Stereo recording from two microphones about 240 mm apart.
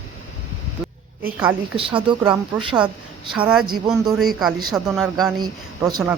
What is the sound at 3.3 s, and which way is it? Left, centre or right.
A woman's voice, centre.